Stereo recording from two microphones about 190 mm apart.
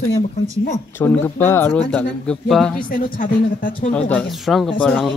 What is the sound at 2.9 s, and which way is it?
Speech, 45° left (ahead or behind).